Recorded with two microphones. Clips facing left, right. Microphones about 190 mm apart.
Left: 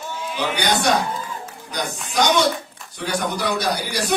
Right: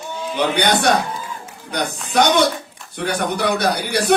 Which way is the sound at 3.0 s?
60° right (ahead or behind).